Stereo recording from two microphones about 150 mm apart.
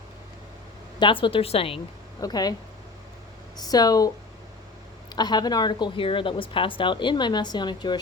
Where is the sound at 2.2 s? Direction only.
25° left (ahead or behind).